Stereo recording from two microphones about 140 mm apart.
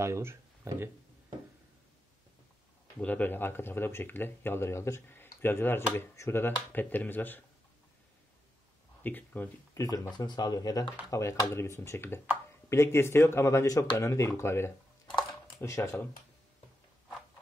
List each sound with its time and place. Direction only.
0.0 s speech: 20° right (ahead or behind)
3.0 s speech: 15° left (ahead or behind)
9.0 s speech: 15° left (ahead or behind)
9.8 s speech: 30° left (ahead or behind)